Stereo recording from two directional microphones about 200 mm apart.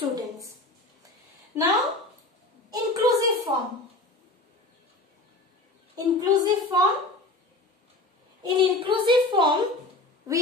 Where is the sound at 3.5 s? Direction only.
20° right (ahead or behind).